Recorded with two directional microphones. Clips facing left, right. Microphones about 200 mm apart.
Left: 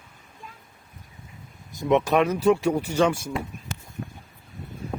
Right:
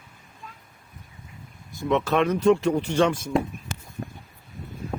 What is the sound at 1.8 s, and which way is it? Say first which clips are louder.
Speech: left 2 dB; 20° left (ahead or behind).